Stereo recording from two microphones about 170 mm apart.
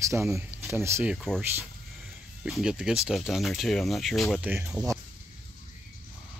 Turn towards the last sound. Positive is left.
turn(degrees=-5)  # may be behind; listen again after turning